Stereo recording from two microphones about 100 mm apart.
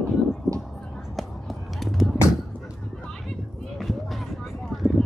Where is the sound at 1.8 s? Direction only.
Centre (ahead or behind).